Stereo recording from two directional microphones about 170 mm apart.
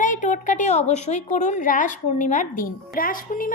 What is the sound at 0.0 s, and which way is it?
A woman's voice, 50° left (ahead or behind).